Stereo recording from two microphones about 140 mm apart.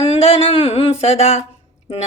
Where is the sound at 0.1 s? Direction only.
45° left (ahead or behind).